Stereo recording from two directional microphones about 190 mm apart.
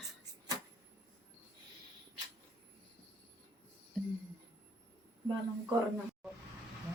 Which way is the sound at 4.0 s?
5° left (ahead or behind).